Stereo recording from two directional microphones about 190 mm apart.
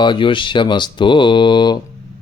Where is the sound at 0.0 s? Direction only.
25° left (ahead or behind).